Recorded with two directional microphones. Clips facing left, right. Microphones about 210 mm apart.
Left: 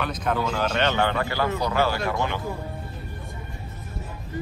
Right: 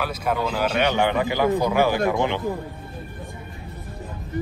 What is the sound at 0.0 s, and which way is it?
Speech, 10° right (ahead or behind).